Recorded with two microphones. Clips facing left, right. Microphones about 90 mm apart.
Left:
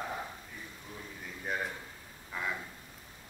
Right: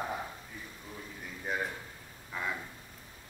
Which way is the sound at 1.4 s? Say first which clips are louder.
Right 1 dB; centre (ahead or behind).